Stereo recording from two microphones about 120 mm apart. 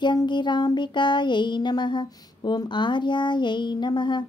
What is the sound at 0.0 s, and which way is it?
Child singing, 40° left (ahead or behind).